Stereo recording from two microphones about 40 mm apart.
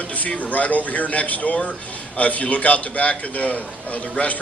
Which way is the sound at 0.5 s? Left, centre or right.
Left.